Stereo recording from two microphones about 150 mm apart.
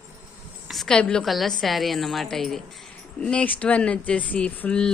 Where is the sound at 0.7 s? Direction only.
Centre (ahead or behind).